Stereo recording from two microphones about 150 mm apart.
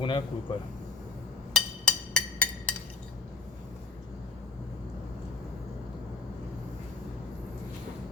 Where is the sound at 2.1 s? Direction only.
5° left (ahead or behind).